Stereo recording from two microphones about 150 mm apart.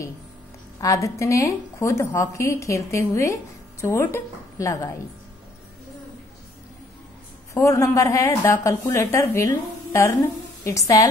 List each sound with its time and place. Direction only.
0.7 s a woman's voice: 20° left (ahead or behind)
7.5 s a woman's voice: 20° left (ahead or behind)